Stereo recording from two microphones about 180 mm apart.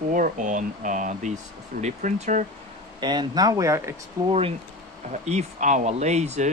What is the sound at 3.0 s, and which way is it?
Speech, 25° right (ahead or behind).